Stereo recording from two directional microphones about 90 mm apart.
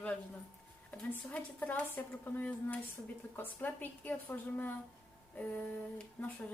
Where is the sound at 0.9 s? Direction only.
15° left (ahead or behind).